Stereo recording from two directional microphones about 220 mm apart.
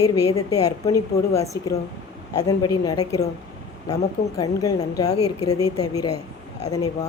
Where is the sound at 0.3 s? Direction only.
15° left (ahead or behind).